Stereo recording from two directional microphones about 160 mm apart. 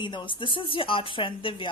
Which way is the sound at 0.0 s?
30° left (ahead or behind).